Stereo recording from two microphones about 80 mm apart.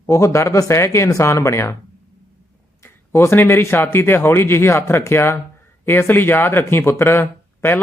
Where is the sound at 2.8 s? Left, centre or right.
Left.